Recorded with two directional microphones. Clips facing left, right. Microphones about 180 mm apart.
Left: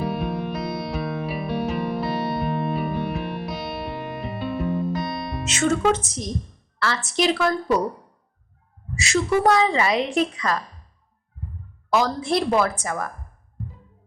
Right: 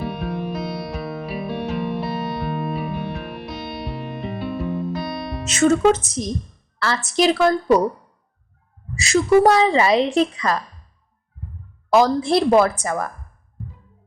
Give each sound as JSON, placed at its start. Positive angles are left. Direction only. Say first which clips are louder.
{"t": 0.0, "sound": "music", "louder": "left 1 dB", "side_deg": 0}
{"t": 5.5, "sound": "a woman's voice", "louder": "right 5 dB", "side_deg": -40}
{"t": 9.0, "sound": "a woman's voice", "louder": "right 6 dB", "side_deg": -35}
{"t": 11.9, "sound": "a woman's voice", "louder": "right 5 dB", "side_deg": -35}